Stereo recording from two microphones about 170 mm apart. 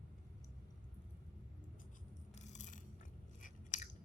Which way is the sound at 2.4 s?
45° left (ahead or behind).